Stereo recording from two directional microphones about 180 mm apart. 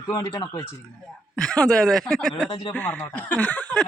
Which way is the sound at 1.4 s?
5° left (ahead or behind).